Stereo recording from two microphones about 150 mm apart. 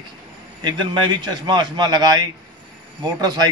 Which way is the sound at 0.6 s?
30° right (ahead or behind).